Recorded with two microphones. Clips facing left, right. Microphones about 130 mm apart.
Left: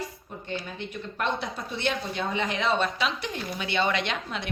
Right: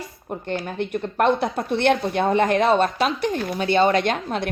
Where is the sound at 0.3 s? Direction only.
55° right (ahead or behind).